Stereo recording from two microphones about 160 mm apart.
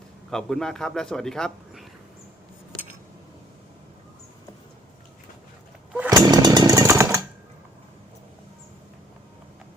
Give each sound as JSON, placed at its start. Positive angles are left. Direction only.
{"t": 0.3, "sound": "a man's voice", "side_deg": 5}
{"t": 6.1, "sound": "chainsaw", "side_deg": -25}